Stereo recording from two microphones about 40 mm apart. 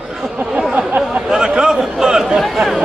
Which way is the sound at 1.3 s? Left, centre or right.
Right.